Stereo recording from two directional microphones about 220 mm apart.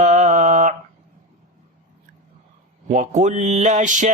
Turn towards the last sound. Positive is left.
turn(degrees=-35)  # may be behind; listen again after turning